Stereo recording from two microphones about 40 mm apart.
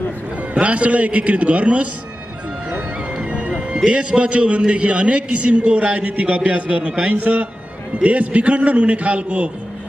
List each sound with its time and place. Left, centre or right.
0.6 s a man's voice: right